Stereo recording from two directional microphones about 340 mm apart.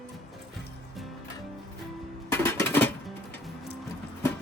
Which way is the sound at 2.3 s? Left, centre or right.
Centre.